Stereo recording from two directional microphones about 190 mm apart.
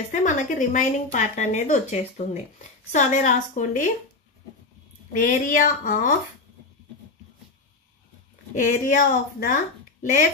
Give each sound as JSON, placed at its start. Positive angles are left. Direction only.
{"t": 0.1, "sound": "speech", "side_deg": 40}
{"t": 5.2, "sound": "speech", "side_deg": 45}
{"t": 8.5, "sound": "speech", "side_deg": 40}